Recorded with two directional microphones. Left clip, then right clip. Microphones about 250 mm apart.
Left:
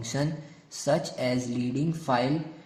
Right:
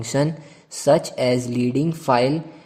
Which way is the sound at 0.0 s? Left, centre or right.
Right.